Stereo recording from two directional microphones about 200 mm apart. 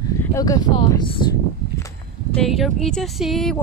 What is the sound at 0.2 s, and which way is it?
Speech, 15° left (ahead or behind).